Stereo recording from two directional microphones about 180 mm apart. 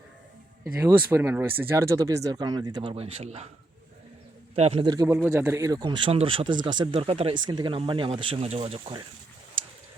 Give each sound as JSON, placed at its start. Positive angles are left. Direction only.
{"t": 0.6, "sound": "speech", "side_deg": -15}
{"t": 4.5, "sound": "a man's voice", "side_deg": -35}
{"t": 5.3, "sound": "speech", "side_deg": -15}